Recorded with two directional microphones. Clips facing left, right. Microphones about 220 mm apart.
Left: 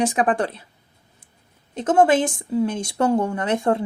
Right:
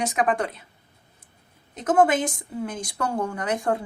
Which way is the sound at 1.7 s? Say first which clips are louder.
Left 3 dB; 30° left (ahead or behind).